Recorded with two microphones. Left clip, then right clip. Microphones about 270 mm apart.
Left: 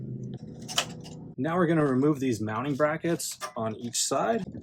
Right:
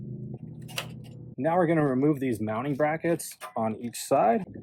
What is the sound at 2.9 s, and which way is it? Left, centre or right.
Speech, centre.